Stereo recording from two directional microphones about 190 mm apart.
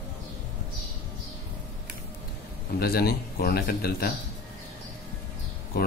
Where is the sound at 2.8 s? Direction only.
55° left (ahead or behind).